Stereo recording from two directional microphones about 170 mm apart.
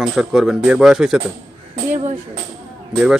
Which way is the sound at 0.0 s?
Centre (ahead or behind).